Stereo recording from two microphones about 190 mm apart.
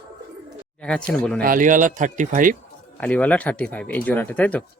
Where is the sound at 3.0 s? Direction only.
5° left (ahead or behind).